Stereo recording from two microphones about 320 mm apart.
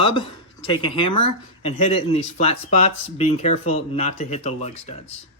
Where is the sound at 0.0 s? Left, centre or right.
Centre.